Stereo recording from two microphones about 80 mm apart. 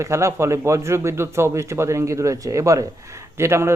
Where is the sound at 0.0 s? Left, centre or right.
Right.